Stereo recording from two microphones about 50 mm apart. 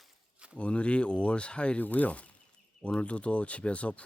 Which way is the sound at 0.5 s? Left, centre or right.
Left.